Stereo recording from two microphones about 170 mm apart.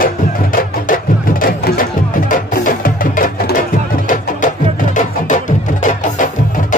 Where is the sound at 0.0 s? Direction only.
55° left (ahead or behind).